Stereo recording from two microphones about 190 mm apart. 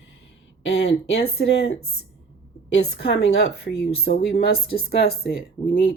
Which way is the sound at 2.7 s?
60° left (ahead or behind).